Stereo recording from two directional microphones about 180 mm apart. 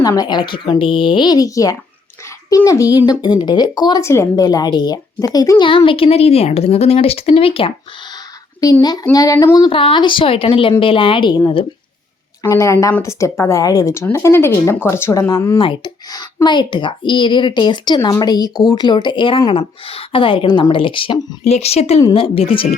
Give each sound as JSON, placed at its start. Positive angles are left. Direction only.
{"t": 0.0, "sound": "a woman's voice", "side_deg": 20}